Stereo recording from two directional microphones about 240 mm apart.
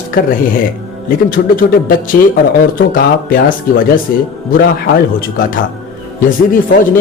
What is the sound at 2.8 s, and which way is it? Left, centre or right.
Speech, left.